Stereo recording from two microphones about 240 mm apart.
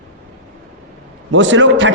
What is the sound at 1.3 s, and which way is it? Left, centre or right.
Speech, right.